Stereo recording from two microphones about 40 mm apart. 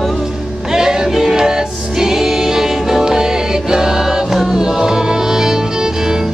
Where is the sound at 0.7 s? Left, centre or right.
Centre.